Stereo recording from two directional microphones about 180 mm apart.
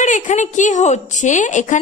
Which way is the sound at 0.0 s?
45° left (ahead or behind).